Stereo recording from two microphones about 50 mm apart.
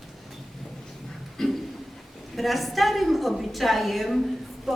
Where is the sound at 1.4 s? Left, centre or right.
Centre.